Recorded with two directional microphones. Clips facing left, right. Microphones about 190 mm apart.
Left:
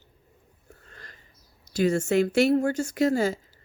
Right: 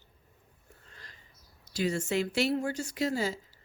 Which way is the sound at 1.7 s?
50° left (ahead or behind).